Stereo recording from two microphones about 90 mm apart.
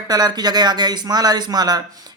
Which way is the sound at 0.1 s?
45° right (ahead or behind).